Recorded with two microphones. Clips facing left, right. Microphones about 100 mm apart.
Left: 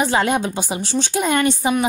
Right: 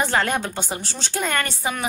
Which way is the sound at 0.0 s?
15° left (ahead or behind).